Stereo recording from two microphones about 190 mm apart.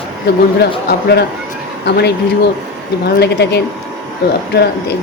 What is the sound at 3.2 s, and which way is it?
A woman's voice, 60° left (ahead or behind).